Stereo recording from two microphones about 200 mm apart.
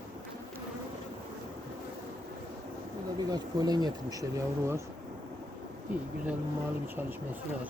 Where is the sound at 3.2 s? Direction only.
20° right (ahead or behind).